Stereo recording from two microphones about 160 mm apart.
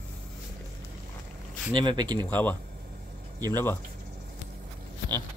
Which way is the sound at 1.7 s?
30° right (ahead or behind).